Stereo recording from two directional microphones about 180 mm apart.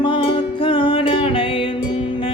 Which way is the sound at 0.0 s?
30° left (ahead or behind).